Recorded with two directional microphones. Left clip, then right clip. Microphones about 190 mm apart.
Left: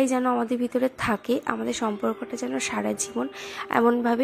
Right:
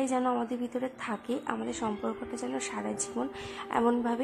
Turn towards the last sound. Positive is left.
turn(degrees=20)  # may be behind; listen again after turning